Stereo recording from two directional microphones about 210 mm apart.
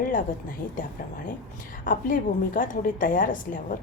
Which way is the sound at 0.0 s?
40° left (ahead or behind).